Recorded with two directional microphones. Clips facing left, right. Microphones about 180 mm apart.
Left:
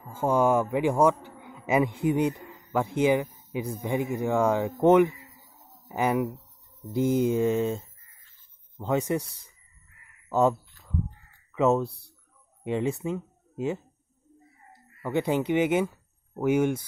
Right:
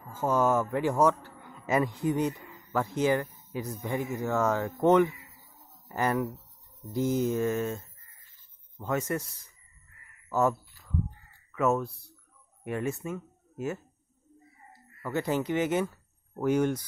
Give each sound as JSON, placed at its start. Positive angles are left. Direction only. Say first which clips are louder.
{"t": 0.2, "sound": "a man's voice", "louder": "left 3 dB", "side_deg": 15}
{"t": 7.0, "sound": "mantra", "louder": "left 4 dB", "side_deg": 60}
{"t": 7.2, "sound": "speech", "louder": "left 4 dB", "side_deg": 15}
{"t": 10.3, "sound": "speech", "louder": "left 3 dB", "side_deg": 15}